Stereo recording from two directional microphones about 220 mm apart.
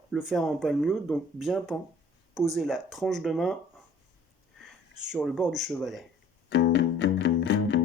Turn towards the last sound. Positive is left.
turn(degrees=50)  # may be behind; listen again after turning